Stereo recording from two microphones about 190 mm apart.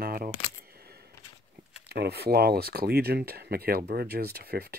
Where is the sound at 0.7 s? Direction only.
55° right (ahead or behind).